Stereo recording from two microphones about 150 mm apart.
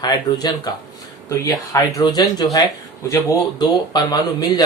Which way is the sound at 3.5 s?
25° left (ahead or behind).